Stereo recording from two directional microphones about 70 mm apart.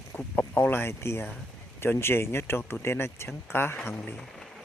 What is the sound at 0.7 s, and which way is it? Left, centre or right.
Speech, left.